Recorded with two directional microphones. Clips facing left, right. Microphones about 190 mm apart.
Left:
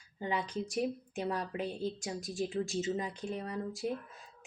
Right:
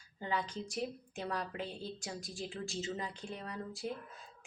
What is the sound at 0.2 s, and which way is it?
A woman's voice, 15° left (ahead or behind).